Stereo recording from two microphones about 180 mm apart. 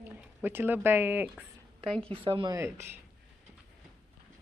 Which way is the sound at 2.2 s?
25° right (ahead or behind).